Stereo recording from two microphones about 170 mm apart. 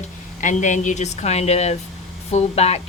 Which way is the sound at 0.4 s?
45° left (ahead or behind).